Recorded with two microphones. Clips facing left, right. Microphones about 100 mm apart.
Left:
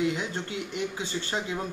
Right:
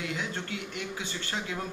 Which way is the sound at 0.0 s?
25° left (ahead or behind).